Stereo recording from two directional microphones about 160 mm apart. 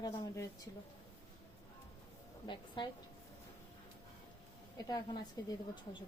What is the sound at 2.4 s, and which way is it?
Speech, 30° left (ahead or behind).